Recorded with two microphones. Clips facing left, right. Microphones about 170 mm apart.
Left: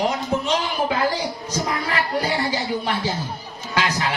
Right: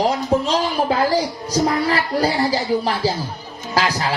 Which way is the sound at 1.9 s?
35° right (ahead or behind).